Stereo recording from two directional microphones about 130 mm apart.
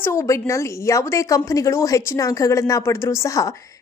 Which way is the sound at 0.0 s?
20° left (ahead or behind).